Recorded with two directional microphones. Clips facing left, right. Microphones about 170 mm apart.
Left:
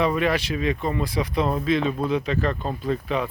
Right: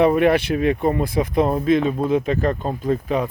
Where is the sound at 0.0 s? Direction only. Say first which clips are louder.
Right 7 dB; 55° right (ahead or behind).